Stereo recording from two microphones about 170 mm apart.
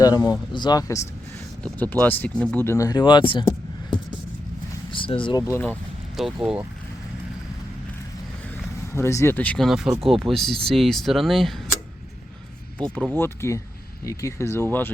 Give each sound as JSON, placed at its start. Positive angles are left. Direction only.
{"t": 0.0, "sound": "speech", "side_deg": 20}
{"t": 1.6, "sound": "speech", "side_deg": 10}
{"t": 4.9, "sound": "vehicle", "side_deg": 30}
{"t": 5.4, "sound": "speech", "side_deg": 15}
{"t": 6.1, "sound": "speech", "side_deg": -5}
{"t": 8.9, "sound": "speech", "side_deg": 15}
{"t": 12.8, "sound": "speech", "side_deg": 5}